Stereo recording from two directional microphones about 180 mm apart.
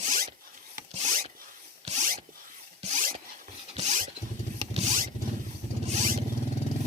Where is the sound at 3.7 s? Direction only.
40° right (ahead or behind).